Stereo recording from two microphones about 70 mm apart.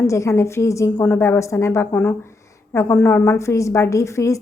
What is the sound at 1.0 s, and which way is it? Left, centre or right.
A woman's voice, left.